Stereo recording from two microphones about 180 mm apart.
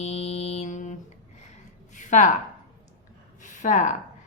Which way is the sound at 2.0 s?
45° left (ahead or behind).